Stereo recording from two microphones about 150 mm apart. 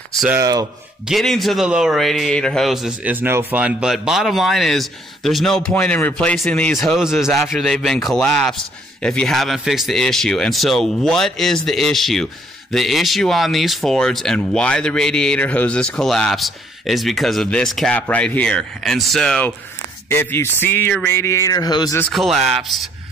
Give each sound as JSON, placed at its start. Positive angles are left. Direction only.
{"t": 0.4, "sound": "speech", "side_deg": -25}
{"t": 1.0, "sound": "a man's voice", "side_deg": 0}
{"t": 22.1, "sound": "a man's voice", "side_deg": 0}